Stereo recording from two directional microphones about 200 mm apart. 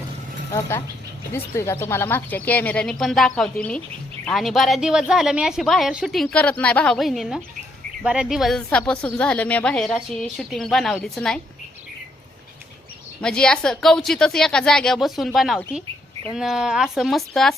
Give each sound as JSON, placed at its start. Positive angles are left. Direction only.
{"t": 1.3, "sound": "a woman's voice", "side_deg": 10}
{"t": 13.2, "sound": "a woman's voice", "side_deg": 5}